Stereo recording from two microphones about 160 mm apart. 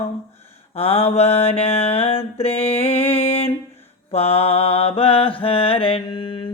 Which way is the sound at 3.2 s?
40° left (ahead or behind).